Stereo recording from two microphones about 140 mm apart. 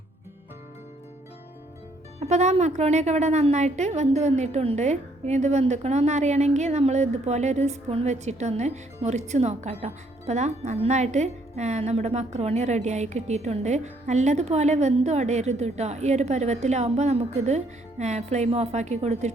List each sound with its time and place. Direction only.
2.1 s a woman's voice: 55° right (ahead or behind)